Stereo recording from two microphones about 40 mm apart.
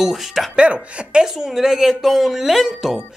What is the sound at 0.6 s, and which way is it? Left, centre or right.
Speech, right.